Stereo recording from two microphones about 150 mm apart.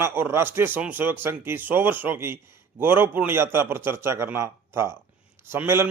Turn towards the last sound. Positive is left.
turn(degrees=-15)  # may be behind; listen again after turning